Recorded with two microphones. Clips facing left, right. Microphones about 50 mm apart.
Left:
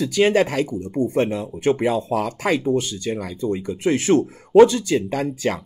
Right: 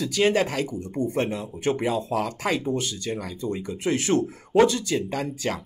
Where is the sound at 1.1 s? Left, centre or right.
Left.